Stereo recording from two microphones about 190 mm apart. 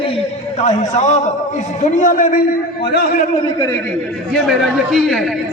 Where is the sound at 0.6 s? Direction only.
35° left (ahead or behind).